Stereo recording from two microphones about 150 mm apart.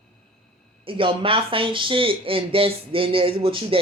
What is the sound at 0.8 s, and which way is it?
Speech, 35° right (ahead or behind).